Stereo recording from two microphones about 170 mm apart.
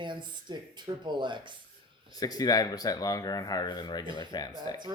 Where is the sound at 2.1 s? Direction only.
20° left (ahead or behind).